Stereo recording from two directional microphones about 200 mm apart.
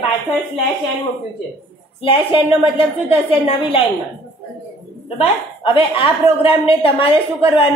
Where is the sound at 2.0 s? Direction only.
25° left (ahead or behind).